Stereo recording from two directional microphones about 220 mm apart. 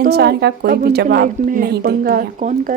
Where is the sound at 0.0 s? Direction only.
50° right (ahead or behind).